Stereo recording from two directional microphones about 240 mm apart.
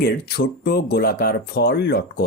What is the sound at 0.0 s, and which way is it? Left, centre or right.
Speech, left.